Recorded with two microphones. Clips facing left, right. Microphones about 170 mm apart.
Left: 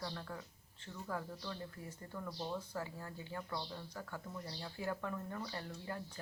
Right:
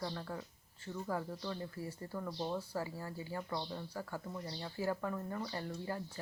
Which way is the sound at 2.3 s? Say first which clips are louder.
Right 3 dB; 25° right (ahead or behind).